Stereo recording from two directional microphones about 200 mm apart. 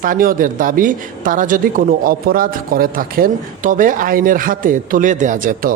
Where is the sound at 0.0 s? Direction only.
45° right (ahead or behind).